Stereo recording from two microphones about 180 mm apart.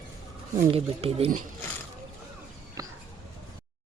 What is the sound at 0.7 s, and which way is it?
Speech, 35° right (ahead or behind).